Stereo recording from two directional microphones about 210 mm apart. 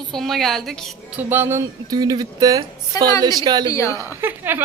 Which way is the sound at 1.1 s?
10° right (ahead or behind).